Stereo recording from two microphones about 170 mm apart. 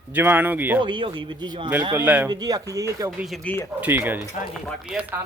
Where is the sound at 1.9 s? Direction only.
10° right (ahead or behind).